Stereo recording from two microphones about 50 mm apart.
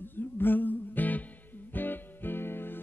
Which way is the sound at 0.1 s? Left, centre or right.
Left.